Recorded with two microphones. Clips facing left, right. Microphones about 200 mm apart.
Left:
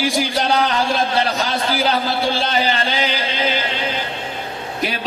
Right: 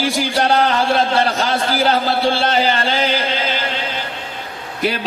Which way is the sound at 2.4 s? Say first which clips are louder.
Right 3 dB; 50° right (ahead or behind).